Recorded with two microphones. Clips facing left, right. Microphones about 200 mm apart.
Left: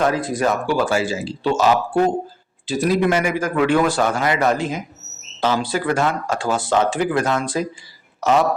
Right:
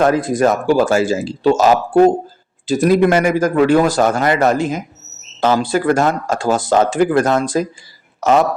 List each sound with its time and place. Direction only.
0.0 s speech: 50° right (ahead or behind)